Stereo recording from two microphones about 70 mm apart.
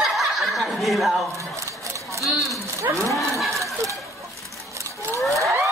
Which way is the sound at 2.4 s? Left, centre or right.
Right.